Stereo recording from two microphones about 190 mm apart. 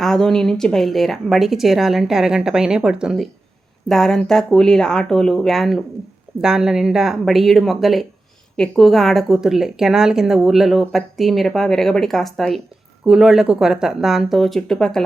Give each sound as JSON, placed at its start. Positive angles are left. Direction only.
{"t": 0.0, "sound": "a woman's voice", "side_deg": 0}